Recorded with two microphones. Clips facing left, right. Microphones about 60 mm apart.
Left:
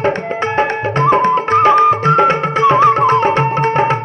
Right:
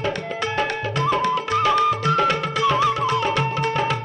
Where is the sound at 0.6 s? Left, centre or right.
Left.